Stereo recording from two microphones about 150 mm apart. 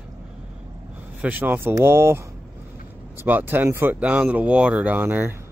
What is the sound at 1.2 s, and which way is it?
Speech, 10° right (ahead or behind).